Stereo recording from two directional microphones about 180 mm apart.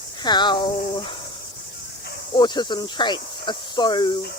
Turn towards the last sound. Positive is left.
turn(degrees=25)  # may be behind; listen again after turning